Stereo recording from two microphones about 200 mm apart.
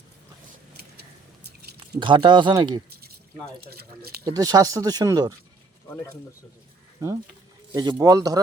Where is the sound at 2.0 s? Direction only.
25° right (ahead or behind).